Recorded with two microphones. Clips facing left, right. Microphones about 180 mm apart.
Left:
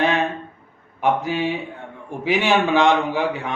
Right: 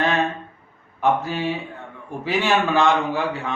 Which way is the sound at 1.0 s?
15° left (ahead or behind).